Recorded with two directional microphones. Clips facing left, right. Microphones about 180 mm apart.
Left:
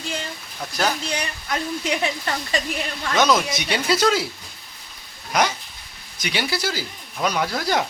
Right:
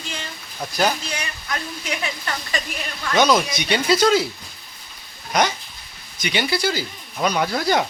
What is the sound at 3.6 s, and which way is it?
Speech, 5° left (ahead or behind).